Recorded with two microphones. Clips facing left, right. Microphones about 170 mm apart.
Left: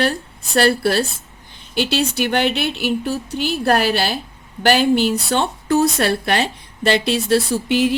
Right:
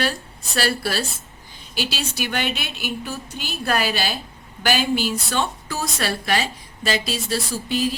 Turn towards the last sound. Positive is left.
turn(degrees=70)  # may be behind; listen again after turning